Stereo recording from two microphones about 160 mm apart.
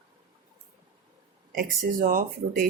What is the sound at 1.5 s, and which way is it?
Speech, 60° right (ahead or behind).